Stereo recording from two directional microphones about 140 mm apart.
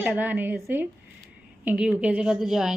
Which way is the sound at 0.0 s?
10° right (ahead or behind).